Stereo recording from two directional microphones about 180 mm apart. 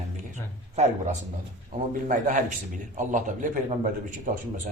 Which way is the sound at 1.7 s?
45° right (ahead or behind).